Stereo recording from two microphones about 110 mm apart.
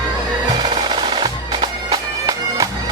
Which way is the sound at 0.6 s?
45° right (ahead or behind).